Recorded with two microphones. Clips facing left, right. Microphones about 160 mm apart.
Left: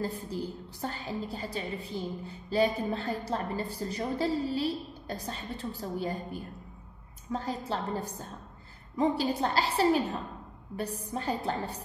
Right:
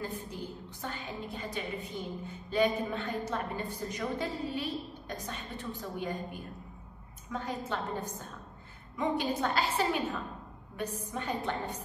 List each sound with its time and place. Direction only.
0.0 s a woman's voice: 35° left (ahead or behind)